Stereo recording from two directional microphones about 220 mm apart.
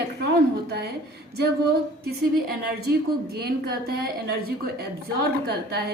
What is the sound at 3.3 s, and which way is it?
A woman's voice, 45° right (ahead or behind).